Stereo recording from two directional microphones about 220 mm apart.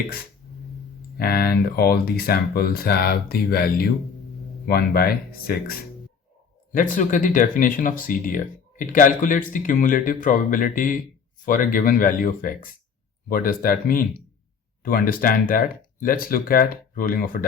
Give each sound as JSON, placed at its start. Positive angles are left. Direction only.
{"t": 1.2, "sound": "speech", "side_deg": 45}
{"t": 6.7, "sound": "speech", "side_deg": 35}